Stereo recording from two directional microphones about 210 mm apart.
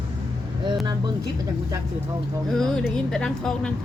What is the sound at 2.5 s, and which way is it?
A woman's voice, 5° left (ahead or behind).